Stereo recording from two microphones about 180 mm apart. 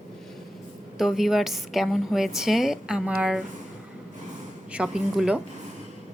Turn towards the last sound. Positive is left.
turn(degrees=-5)  # may be behind; listen again after turning